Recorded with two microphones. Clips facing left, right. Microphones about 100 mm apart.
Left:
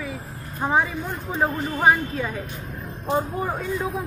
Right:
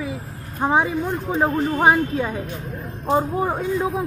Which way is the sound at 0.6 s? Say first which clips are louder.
Right 3 dB; 20° right (ahead or behind).